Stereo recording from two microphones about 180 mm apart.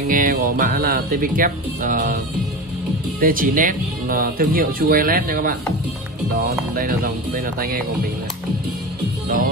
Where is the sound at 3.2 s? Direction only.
50° right (ahead or behind).